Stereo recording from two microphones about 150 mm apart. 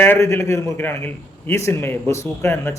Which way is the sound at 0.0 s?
15° left (ahead or behind).